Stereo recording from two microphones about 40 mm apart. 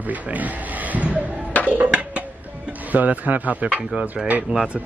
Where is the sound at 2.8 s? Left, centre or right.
Right.